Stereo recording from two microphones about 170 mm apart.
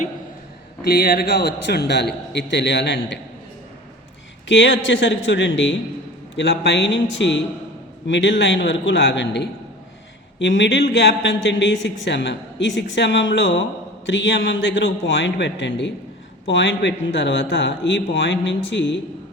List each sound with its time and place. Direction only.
0.8 s a man's voice: 65° left (ahead or behind); by 3.2 s 90° left
4.4 s speech: 90° left